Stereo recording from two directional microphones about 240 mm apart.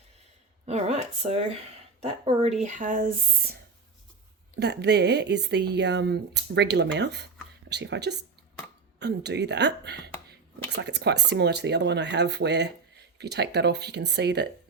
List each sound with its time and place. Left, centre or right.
0.6 s speech: right
4.6 s speech: right